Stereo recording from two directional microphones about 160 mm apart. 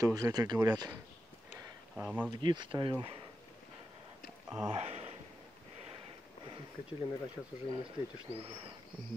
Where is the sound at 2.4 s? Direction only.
30° right (ahead or behind).